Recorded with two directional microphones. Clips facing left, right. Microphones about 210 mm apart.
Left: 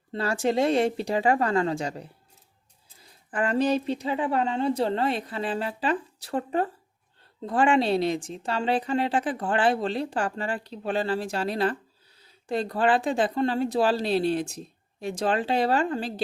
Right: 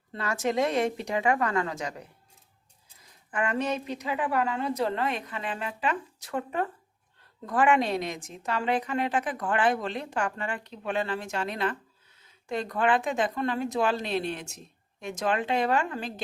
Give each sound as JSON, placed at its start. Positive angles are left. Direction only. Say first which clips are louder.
{"t": 0.1, "sound": "a woman's voice", "louder": "left 4 dB", "side_deg": 30}